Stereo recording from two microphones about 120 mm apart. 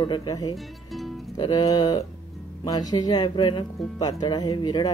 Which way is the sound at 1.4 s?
35° left (ahead or behind).